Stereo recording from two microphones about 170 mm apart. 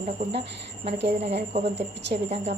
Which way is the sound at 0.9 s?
80° right.